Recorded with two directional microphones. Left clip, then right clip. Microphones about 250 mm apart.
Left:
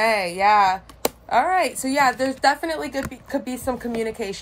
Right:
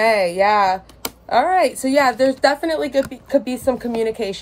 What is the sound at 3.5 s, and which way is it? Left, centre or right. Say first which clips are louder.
Speech: right 6 dB; centre.